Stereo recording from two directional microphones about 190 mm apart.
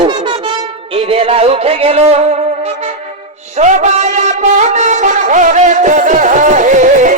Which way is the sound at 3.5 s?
35° right (ahead or behind).